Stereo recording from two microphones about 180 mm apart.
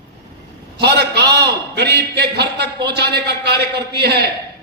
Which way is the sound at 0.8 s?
65° right (ahead or behind).